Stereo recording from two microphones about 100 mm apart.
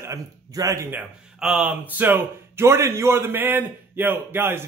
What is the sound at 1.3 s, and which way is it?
A man's voice, 5° right (ahead or behind).